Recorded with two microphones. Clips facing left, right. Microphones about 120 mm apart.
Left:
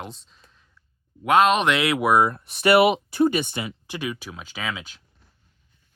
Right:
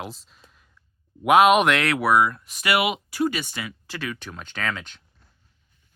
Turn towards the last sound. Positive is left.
turn(degrees=5)  # may be behind; listen again after turning